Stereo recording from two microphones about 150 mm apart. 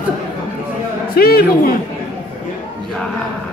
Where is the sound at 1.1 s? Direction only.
85° left.